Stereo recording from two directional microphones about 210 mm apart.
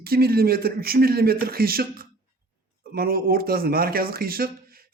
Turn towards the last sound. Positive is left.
turn(degrees=-45)  # may be behind; listen again after turning